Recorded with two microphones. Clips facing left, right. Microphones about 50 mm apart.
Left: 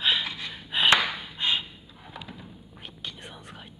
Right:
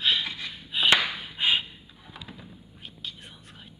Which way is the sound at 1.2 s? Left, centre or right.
Centre.